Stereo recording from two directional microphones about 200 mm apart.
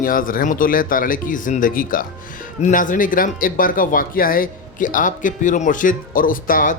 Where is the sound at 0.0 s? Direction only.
45° left (ahead or behind).